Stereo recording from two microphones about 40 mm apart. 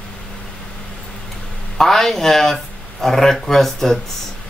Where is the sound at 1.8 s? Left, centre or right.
Centre.